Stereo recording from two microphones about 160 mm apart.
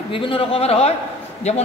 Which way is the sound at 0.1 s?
35° left (ahead or behind).